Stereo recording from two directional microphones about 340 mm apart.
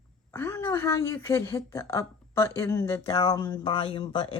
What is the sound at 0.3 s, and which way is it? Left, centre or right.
A woman's voice, centre.